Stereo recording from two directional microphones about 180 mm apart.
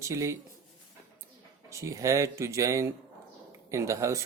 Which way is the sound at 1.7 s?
15° right (ahead or behind).